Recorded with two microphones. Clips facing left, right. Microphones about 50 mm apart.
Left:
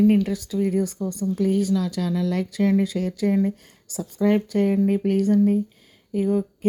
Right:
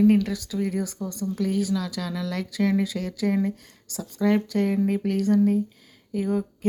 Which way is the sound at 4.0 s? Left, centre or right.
Centre.